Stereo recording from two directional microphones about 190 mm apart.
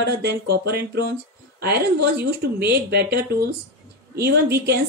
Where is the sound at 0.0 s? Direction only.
60° right (ahead or behind).